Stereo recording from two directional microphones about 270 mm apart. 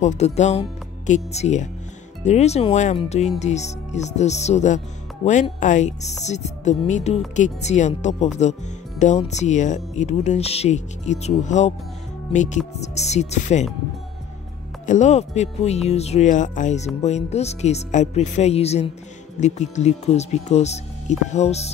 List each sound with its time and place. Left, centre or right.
0.0 s speech: left
14.9 s speech: left